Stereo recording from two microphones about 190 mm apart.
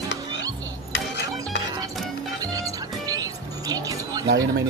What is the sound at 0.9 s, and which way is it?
Music, 65° left (ahead or behind).